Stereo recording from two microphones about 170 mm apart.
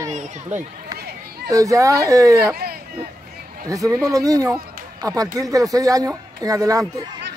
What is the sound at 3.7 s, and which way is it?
Speech, 20° right (ahead or behind).